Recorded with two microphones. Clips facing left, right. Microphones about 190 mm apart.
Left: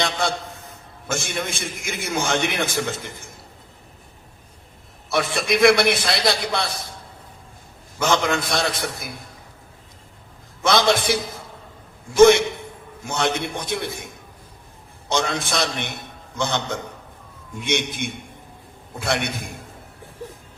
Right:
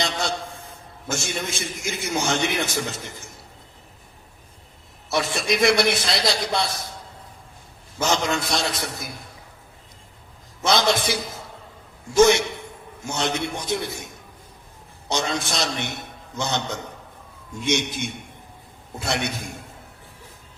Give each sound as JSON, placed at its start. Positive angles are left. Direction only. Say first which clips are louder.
{"t": 0.0, "sound": "a man's voice", "louder": "left 2 dB", "side_deg": 55}
{"t": 5.1, "sound": "a man's voice", "louder": "left 2 dB", "side_deg": 55}
{"t": 7.9, "sound": "a man's voice", "louder": "left 2 dB", "side_deg": 55}
{"t": 10.6, "sound": "a man's voice", "louder": "left 2 dB", "side_deg": 55}
{"t": 15.1, "sound": "a man's voice", "louder": "left 2 dB", "side_deg": 55}